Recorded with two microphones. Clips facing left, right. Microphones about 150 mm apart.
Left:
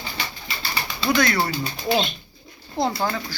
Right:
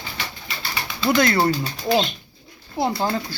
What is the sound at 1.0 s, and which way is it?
Speech, 25° right (ahead or behind).